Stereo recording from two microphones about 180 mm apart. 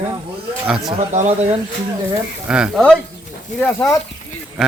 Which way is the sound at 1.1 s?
40° right (ahead or behind).